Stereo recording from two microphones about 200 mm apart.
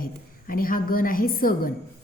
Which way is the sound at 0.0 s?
45° left (ahead or behind).